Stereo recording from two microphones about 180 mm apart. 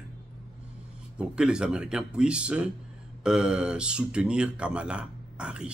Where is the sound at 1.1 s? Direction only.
5° right (ahead or behind).